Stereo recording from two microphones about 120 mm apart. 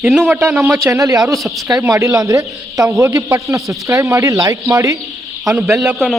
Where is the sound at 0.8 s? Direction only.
25° right (ahead or behind).